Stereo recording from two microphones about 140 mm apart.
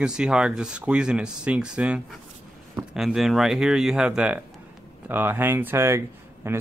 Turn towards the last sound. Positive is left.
turn(degrees=-20)  # may be behind; listen again after turning